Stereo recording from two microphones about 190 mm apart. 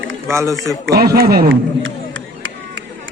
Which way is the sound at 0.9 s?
55° right (ahead or behind).